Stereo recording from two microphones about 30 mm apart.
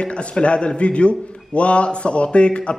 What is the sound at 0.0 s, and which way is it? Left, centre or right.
A man's voice, left.